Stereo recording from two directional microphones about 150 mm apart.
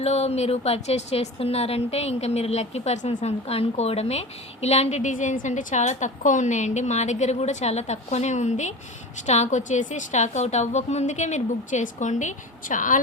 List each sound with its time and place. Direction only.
0.0 s a woman's voice: 45° left (ahead or behind)